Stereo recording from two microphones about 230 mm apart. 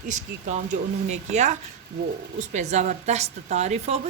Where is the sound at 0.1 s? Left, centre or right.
Right.